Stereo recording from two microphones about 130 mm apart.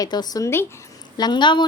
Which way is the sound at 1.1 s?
35° left (ahead or behind).